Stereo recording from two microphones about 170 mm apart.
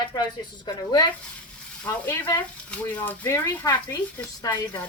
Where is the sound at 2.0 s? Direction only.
10° left (ahead or behind).